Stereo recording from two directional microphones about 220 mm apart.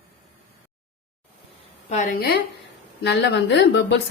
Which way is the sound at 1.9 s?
35° left (ahead or behind).